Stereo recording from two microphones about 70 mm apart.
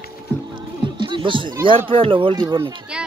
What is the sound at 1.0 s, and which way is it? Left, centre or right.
Music, right.